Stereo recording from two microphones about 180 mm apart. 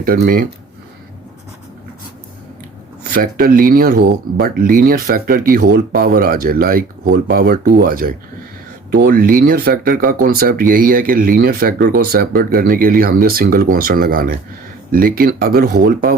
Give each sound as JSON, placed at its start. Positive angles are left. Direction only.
{"t": 0.0, "sound": "speech", "side_deg": -55}
{"t": 3.1, "sound": "speech", "side_deg": -55}